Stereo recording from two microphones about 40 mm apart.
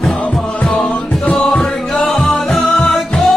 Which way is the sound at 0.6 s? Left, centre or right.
Centre.